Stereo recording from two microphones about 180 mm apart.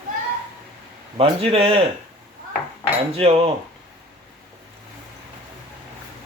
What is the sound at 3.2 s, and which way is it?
Speech, 35° right (ahead or behind).